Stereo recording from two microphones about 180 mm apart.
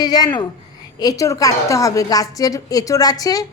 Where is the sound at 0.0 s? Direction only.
20° left (ahead or behind).